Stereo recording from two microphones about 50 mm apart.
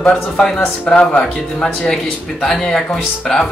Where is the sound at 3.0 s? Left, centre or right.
Centre.